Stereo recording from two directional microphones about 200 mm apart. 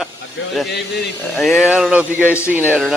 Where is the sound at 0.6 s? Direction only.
55° left (ahead or behind).